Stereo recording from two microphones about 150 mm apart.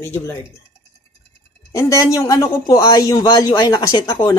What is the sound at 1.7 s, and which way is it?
Speech, 20° left (ahead or behind).